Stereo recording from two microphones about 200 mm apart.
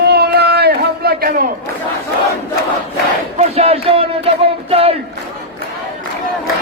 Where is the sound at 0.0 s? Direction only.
55° right (ahead or behind).